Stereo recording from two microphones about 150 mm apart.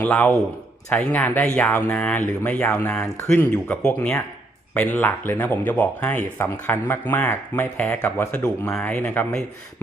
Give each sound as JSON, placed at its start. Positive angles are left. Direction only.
{"t": 0.0, "sound": "speech", "side_deg": 5}
{"t": 8.7, "sound": "speech", "side_deg": 10}